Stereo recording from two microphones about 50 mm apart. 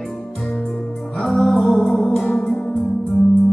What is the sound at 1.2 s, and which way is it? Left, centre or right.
Music, centre.